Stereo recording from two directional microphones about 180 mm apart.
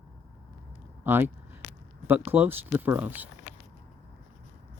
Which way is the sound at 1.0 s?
10° right (ahead or behind).